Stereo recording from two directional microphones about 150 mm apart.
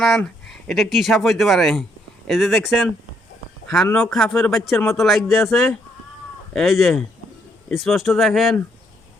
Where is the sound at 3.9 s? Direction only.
5° left (ahead or behind).